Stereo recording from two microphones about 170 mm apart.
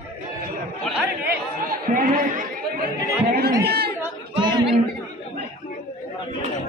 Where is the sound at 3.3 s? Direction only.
65° right (ahead or behind).